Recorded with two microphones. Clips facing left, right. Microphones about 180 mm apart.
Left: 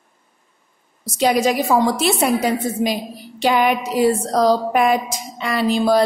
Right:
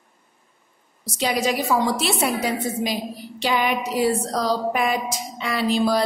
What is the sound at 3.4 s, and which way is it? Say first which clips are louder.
A woman's voice: left 5 dB; 50° left (ahead or behind).